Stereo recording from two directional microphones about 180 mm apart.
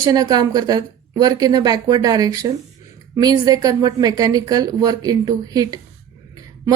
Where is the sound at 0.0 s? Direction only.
20° right (ahead or behind).